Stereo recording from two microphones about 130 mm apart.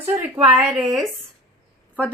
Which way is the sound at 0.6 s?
5° right (ahead or behind).